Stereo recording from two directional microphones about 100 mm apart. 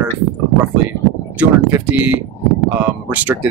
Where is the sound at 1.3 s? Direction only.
20° right (ahead or behind).